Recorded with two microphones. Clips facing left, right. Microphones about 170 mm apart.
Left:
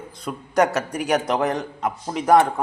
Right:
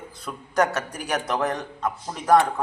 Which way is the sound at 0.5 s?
Centre (ahead or behind).